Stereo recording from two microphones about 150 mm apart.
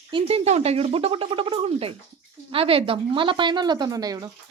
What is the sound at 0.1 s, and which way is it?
Speech, 40° right (ahead or behind).